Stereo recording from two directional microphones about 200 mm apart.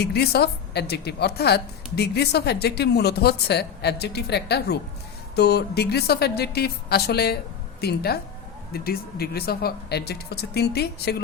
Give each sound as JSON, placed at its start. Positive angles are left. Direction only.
{"t": 0.0, "sound": "a woman's voice", "side_deg": 55}